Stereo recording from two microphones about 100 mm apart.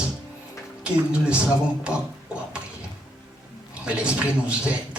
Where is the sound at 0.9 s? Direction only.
10° right (ahead or behind).